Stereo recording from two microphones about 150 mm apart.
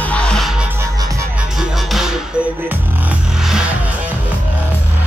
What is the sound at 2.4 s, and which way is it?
Music, 15° left (ahead or behind).